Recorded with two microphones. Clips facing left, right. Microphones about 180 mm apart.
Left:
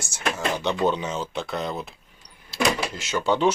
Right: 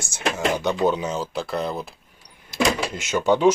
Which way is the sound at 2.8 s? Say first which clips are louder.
Right 4 dB; 15° right (ahead or behind).